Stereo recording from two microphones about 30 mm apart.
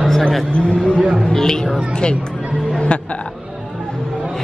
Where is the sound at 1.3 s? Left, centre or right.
Left.